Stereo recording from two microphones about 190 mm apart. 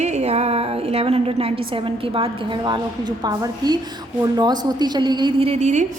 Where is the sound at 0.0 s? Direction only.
35° right (ahead or behind).